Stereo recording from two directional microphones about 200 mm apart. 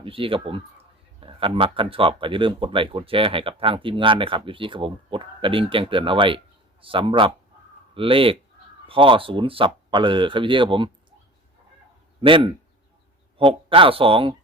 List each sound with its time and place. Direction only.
0.0 s speech: 25° right (ahead or behind)
12.2 s speech: 25° right (ahead or behind)